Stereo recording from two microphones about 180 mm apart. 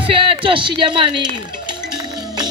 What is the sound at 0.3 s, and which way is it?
Speech, 30° right (ahead or behind).